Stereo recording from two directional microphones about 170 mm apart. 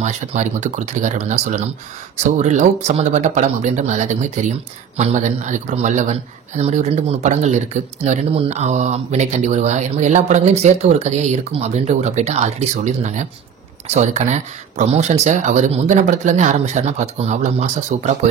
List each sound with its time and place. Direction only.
0.0 s speech: 40° right (ahead or behind)